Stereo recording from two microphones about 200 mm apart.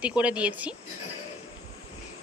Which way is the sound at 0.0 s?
5° right (ahead or behind).